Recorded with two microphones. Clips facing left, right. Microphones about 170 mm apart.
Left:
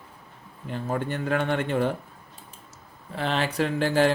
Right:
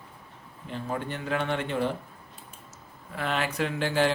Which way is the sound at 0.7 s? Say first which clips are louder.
Left 4 dB; 45° left (ahead or behind).